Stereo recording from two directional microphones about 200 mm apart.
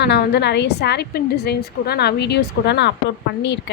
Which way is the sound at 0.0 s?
55° left (ahead or behind).